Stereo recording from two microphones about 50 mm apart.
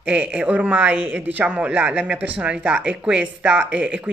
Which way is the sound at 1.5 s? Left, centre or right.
Right.